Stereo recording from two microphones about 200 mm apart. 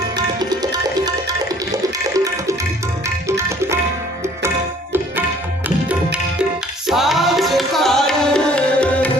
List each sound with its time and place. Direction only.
0.2 s toilet flush: 20° right (ahead or behind)
3.2 s music: 15° right (ahead or behind)
4.4 s tabla: 10° right (ahead or behind)
6.8 s music: centre (ahead or behind)